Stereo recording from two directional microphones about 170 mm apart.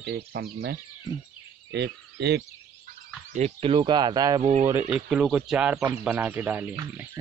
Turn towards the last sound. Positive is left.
turn(degrees=-15)  # may be behind; listen again after turning